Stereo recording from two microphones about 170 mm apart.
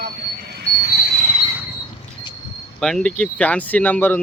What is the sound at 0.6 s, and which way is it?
Cricket, 65° right (ahead or behind).